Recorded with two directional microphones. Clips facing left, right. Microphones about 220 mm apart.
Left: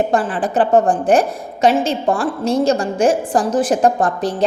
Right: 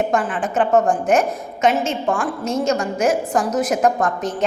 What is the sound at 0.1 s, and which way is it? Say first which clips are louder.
A woman's voice: left 3 dB; 35° left (ahead or behind).